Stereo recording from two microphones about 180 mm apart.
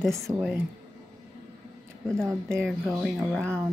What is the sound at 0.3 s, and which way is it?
Speech, 20° right (ahead or behind).